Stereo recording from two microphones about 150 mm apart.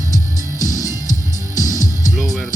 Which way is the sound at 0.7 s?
25° left (ahead or behind).